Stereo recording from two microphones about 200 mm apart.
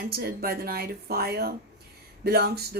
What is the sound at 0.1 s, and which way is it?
Speech, 50° right (ahead or behind).